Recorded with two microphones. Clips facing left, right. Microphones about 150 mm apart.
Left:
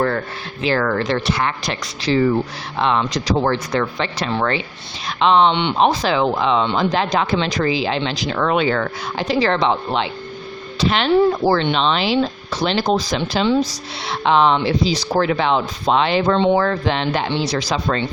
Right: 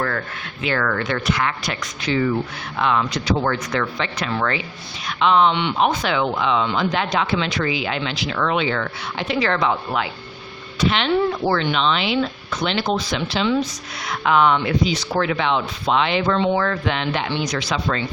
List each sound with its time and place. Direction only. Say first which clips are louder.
0.6 s speech: left 4 dB; 30° left (ahead or behind)
10.8 s speech: left 4 dB; 40° left (ahead or behind)